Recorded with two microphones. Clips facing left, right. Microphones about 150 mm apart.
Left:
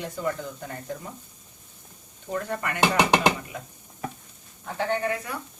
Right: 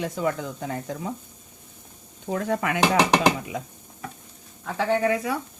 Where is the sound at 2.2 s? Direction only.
90° right.